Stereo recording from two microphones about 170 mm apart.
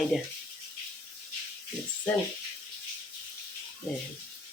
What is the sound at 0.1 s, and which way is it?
Speech, centre (ahead or behind).